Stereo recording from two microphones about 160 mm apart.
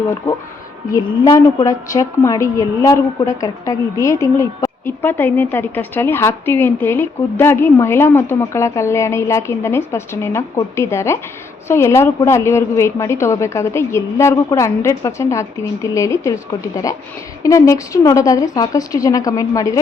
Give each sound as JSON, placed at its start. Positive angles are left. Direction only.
{"t": 0.9, "sound": "a woman's voice", "side_deg": 20}